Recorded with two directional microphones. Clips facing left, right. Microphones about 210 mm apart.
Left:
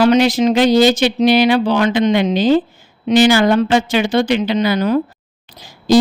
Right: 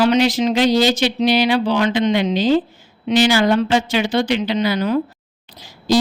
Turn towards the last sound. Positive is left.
turn(degrees=50)  # may be behind; listen again after turning